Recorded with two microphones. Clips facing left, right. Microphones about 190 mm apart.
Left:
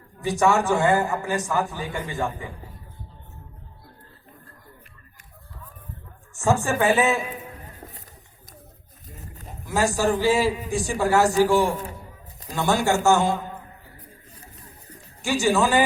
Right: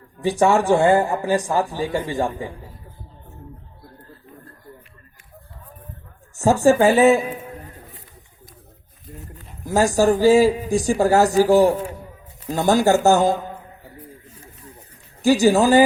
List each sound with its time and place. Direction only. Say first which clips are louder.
0.2 s a man's voice: right 4 dB; 30° right (ahead or behind)
6.3 s a man's voice: right 7 dB; 35° right (ahead or behind)
9.3 s a sound: left 1 dB; 40° left (ahead or behind)
9.6 s a man's voice: right 5 dB; 40° right (ahead or behind)
14.3 s a sound: right 3 dB; 35° left (ahead or behind)
15.2 s a man's voice: right 6 dB; 35° right (ahead or behind)